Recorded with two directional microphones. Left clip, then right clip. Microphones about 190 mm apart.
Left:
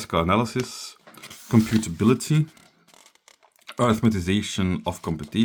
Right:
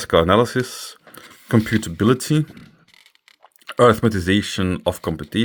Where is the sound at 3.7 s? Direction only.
25° right (ahead or behind).